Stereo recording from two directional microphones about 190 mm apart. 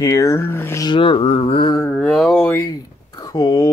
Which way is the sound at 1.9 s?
Centre (ahead or behind).